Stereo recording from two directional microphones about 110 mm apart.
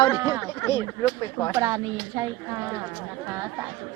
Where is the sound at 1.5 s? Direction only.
30° right (ahead or behind).